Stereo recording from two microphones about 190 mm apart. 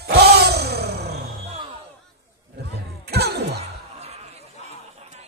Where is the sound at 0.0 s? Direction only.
60° right (ahead or behind).